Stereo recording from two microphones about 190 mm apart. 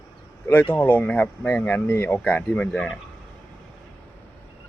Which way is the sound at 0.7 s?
10° left (ahead or behind).